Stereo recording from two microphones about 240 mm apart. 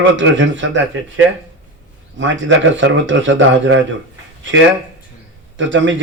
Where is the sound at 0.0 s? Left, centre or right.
Right.